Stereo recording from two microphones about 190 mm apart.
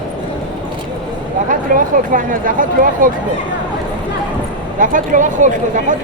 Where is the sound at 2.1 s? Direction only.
45° right (ahead or behind).